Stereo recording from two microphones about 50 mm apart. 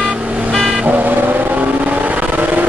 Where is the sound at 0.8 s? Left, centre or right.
Right.